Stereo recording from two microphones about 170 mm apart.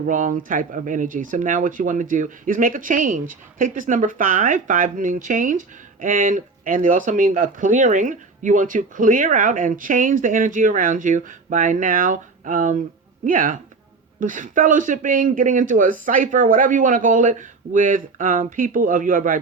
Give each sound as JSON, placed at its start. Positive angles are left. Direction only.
{"t": 0.0, "sound": "speech", "side_deg": -50}